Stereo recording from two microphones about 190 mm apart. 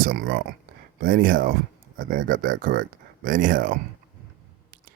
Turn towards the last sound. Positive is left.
turn(degrees=-45)  # may be behind; listen again after turning